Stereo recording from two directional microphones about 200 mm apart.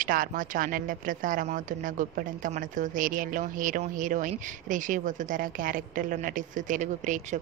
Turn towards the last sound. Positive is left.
turn(degrees=-40)  # may be behind; listen again after turning